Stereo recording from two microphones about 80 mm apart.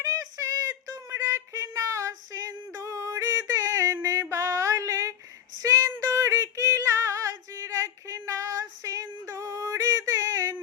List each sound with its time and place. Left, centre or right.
0.0 s child singing: right
5.5 s female singing: right